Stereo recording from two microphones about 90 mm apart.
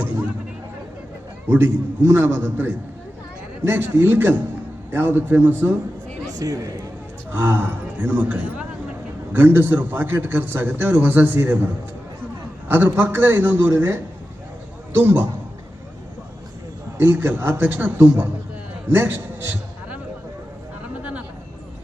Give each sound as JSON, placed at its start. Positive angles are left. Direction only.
{"t": 1.5, "sound": "a man's voice", "side_deg": -25}
{"t": 6.3, "sound": "speech", "side_deg": -40}
{"t": 7.3, "sound": "a man's voice", "side_deg": -25}
{"t": 17.0, "sound": "a man's voice", "side_deg": -25}
{"t": 21.0, "sound": "a sound", "side_deg": -15}